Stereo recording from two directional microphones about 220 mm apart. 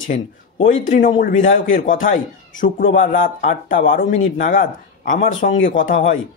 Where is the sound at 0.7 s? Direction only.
35° left (ahead or behind).